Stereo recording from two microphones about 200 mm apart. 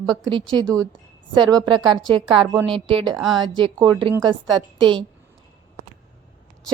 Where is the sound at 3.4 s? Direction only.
25° right (ahead or behind).